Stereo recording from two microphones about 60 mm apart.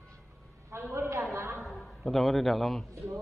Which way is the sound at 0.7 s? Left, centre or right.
Right.